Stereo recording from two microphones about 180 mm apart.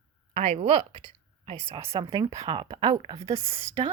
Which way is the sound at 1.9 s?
25° right (ahead or behind).